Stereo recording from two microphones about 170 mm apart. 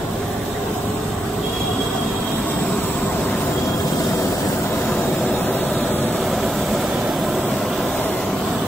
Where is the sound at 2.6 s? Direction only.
10° left (ahead or behind).